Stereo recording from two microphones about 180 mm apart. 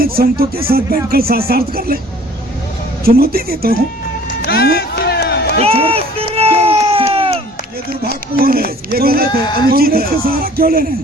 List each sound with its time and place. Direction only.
0.0 s speech: 55° right (ahead or behind)
3.0 s speech: 55° right (ahead or behind)
4.4 s music: 60° left (ahead or behind)
5.5 s run: 35° right (ahead or behind)
8.4 s speech: 55° right (ahead or behind)